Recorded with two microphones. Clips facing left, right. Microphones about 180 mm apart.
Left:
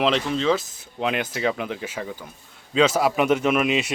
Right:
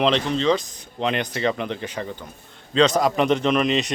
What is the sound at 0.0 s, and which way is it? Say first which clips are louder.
A man's voice: right 1 dB; 5° left (ahead or behind).